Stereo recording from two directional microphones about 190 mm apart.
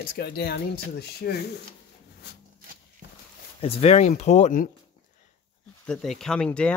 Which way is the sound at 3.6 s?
35° left (ahead or behind).